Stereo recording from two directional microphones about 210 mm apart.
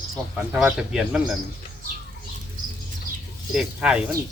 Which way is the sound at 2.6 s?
40° right (ahead or behind).